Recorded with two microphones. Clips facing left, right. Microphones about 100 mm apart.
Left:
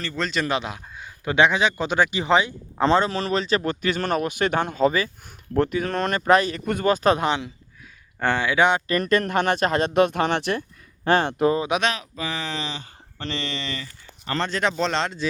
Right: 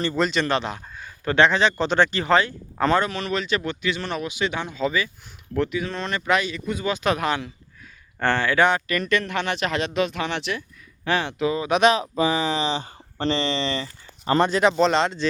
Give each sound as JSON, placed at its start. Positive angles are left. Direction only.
{"t": 0.2, "sound": "speech", "side_deg": 0}
{"t": 6.7, "sound": "speech", "side_deg": 50}
{"t": 8.9, "sound": "speech", "side_deg": 40}
{"t": 11.9, "sound": "speech", "side_deg": -25}
{"t": 12.6, "sound": "speech", "side_deg": -25}
{"t": 14.3, "sound": "speech", "side_deg": -10}